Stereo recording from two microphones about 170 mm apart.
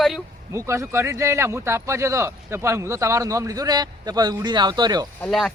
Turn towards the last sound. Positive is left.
turn(degrees=5)  # may be behind; listen again after turning